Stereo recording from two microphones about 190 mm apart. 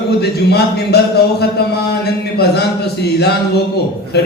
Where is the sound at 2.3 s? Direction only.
60° left (ahead or behind).